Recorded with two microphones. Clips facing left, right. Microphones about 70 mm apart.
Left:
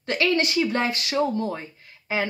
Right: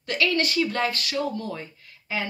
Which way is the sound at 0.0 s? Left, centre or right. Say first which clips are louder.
Left 2 dB; left.